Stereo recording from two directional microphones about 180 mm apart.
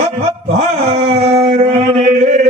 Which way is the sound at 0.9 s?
35° right (ahead or behind).